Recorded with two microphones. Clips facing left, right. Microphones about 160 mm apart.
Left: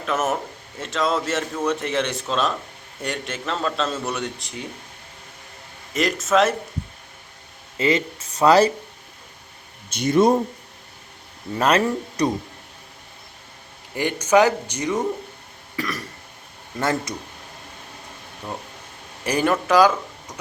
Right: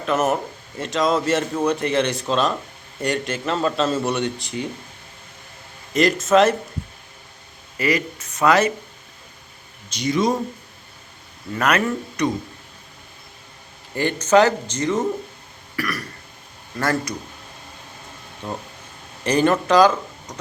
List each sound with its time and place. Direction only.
0.0 s a man's voice: centre (ahead or behind)
5.9 s a man's voice: 5° left (ahead or behind)
7.8 s speech: 25° left (ahead or behind)
9.9 s speech: 55° left (ahead or behind)
11.5 s speech: 30° left (ahead or behind)
13.9 s speech: 10° left (ahead or behind)
15.7 s burping: 20° left (ahead or behind)
16.8 s speech: 20° left (ahead or behind)
18.4 s a man's voice: centre (ahead or behind)